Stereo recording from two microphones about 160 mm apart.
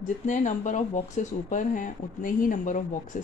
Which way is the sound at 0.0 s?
50° left (ahead or behind).